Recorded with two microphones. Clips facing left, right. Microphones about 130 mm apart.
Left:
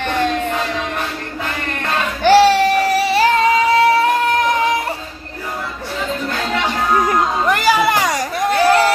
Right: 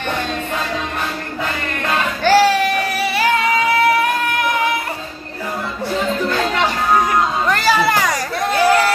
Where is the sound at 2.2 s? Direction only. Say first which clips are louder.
Left 3 dB; 25° left (ahead or behind).